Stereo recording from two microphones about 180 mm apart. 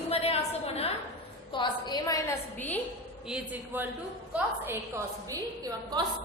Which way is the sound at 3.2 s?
5° right (ahead or behind).